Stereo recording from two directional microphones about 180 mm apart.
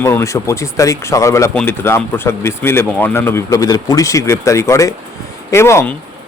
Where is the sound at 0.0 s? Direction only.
15° left (ahead or behind).